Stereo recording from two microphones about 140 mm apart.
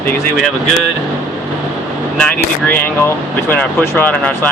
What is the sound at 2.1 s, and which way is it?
Speech, 10° left (ahead or behind).